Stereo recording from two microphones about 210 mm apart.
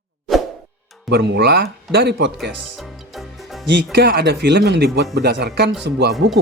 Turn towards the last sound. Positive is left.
turn(degrees=-50)  # may be behind; listen again after turning